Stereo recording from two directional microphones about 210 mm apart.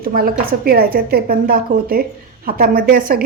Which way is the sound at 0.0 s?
45° right (ahead or behind).